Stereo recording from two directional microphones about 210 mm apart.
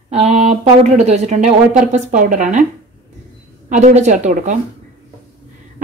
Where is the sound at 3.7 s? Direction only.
35° right (ahead or behind).